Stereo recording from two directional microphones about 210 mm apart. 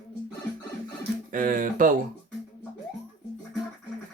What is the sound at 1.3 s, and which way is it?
Speech, 40° right (ahead or behind).